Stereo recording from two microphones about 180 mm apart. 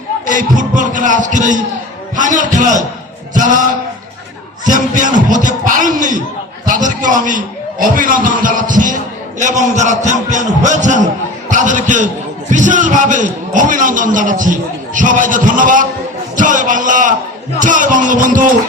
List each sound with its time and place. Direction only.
0.3 s a man's voice: 45° right (ahead or behind)
4.6 s a man's voice: 45° right (ahead or behind)